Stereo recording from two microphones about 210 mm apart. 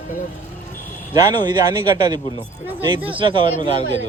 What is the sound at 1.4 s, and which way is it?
Speech, 20° right (ahead or behind).